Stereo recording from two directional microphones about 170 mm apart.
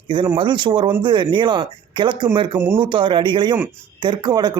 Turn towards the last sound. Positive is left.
turn(degrees=-25)  # may be behind; listen again after turning